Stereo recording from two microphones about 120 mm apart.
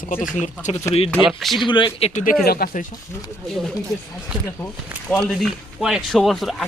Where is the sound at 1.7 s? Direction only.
40° left (ahead or behind).